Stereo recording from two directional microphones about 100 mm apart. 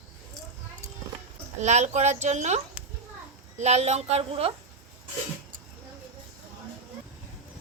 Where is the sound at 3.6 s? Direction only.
90° right.